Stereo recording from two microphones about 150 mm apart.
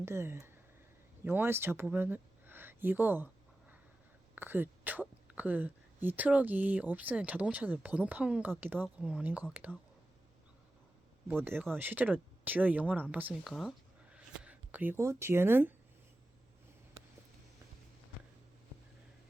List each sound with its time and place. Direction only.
0.0 s speech: 15° right (ahead or behind)
4.4 s speech: 15° right (ahead or behind)
11.3 s speech: 15° right (ahead or behind)
13.5 s a sound: centre (ahead or behind)